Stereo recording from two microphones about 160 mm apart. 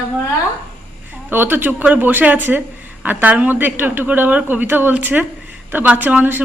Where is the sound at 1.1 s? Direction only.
10° right (ahead or behind).